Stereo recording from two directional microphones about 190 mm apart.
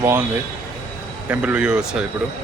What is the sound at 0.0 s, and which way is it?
Speech, 10° right (ahead or behind).